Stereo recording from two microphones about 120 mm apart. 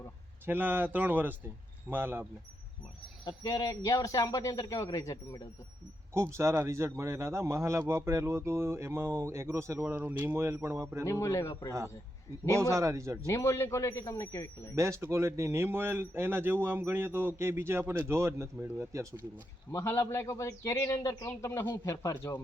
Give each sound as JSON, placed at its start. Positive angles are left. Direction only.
{"t": 0.4, "sound": "speech", "side_deg": -15}
{"t": 3.2, "sound": "speech", "side_deg": 30}
{"t": 6.1, "sound": "speech", "side_deg": -20}
{"t": 11.0, "sound": "speech", "side_deg": 25}
{"t": 12.5, "sound": "speech", "side_deg": -25}
{"t": 13.2, "sound": "speech", "side_deg": 25}
{"t": 14.8, "sound": "speech", "side_deg": -25}
{"t": 19.7, "sound": "speech", "side_deg": 20}